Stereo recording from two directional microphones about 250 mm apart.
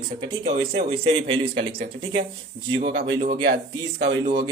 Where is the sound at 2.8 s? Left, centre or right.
Right.